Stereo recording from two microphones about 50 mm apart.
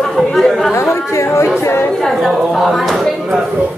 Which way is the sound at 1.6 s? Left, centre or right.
Left.